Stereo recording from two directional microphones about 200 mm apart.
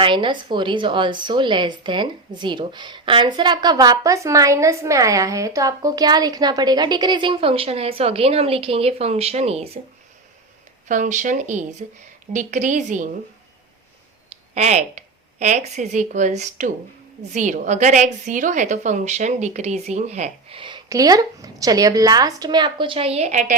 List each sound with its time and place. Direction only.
0.0 s a woman's voice: 25° right (ahead or behind)
10.8 s a woman's voice: 40° right (ahead or behind)
14.5 s a woman's voice: 35° right (ahead or behind)